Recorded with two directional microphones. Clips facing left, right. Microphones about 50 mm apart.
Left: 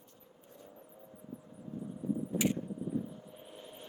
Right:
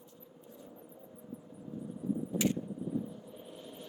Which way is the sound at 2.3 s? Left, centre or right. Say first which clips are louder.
Even; centre.